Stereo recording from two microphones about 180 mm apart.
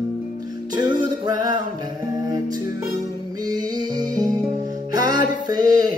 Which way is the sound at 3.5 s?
20° right (ahead or behind).